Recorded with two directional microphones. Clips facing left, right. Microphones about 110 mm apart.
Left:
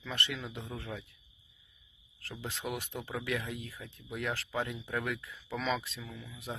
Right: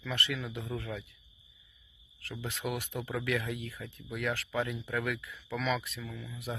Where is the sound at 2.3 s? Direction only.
25° left (ahead or behind).